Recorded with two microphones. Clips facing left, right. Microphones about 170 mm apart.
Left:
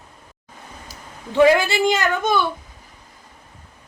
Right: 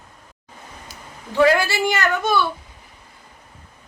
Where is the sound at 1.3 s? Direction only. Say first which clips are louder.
Left 2 dB; 20° left (ahead or behind).